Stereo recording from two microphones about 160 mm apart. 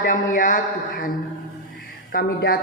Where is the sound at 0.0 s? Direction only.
60° left (ahead or behind).